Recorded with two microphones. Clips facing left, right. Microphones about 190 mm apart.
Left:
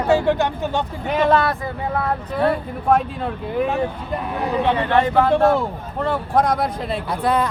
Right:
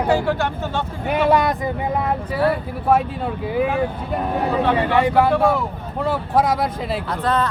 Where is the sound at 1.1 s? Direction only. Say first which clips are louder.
Even; 10° right (ahead or behind).